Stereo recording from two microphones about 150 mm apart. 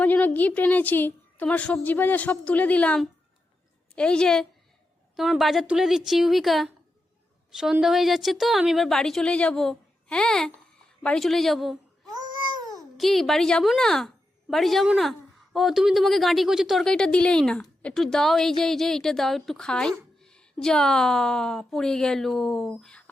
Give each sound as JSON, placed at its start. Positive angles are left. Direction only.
{"t": 0.0, "sound": "a woman's voice", "side_deg": 10}
{"t": 12.0, "sound": "babbling", "side_deg": -25}
{"t": 13.0, "sound": "speech", "side_deg": 0}